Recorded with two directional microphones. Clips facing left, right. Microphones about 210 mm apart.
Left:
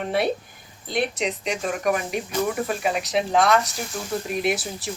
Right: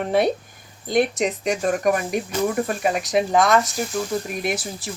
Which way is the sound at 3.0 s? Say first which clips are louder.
Right 2 dB; 45° right (ahead or behind).